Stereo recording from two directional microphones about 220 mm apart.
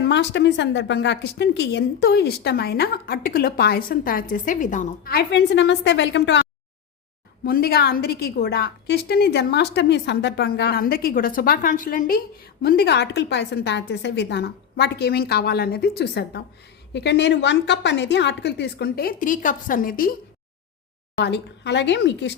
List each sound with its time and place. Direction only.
0.0 s a woman's voice: 50° left (ahead or behind)
7.4 s a woman's voice: 45° left (ahead or behind)
21.2 s a woman's voice: 50° left (ahead or behind)